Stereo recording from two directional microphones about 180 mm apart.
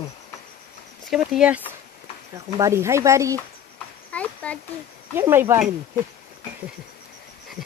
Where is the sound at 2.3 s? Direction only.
15° right (ahead or behind).